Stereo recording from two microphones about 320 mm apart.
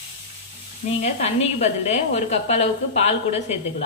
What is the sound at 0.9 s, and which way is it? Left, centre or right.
A woman's voice, centre.